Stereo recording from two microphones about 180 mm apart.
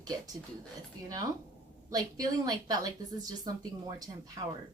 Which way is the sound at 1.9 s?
20° right (ahead or behind).